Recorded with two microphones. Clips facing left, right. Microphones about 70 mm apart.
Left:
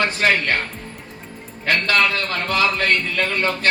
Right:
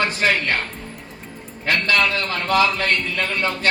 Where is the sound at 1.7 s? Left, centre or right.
Left.